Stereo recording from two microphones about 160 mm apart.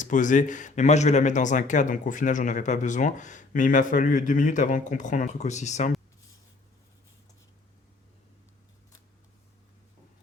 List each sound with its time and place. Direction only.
0.0 s speech: 55° left (ahead or behind)